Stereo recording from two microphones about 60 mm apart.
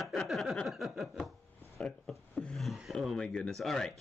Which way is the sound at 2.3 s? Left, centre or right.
Centre.